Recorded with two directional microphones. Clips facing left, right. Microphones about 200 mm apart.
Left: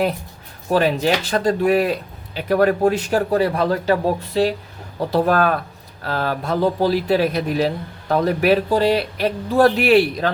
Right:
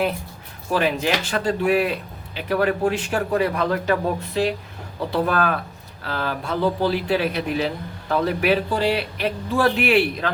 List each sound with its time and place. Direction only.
0.7 s speech: 35° left (ahead or behind)